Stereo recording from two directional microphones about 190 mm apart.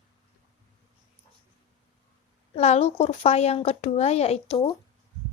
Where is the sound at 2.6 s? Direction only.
35° left (ahead or behind).